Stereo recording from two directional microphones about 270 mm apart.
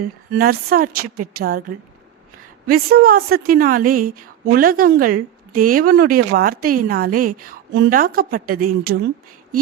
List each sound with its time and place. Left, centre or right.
0.0 s a woman's voice: right
2.6 s a woman's voice: right